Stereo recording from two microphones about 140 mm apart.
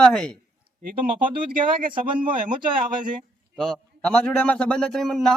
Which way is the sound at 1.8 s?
80° right.